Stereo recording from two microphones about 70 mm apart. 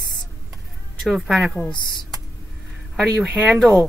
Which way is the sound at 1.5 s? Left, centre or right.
Centre.